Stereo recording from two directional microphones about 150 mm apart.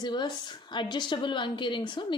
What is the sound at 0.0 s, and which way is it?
A woman's voice, 30° left (ahead or behind).